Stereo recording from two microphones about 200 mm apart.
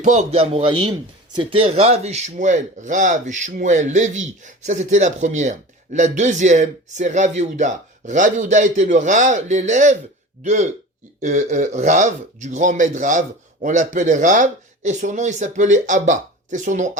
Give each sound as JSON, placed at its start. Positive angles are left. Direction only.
{"t": 0.0, "sound": "a man's voice", "side_deg": -35}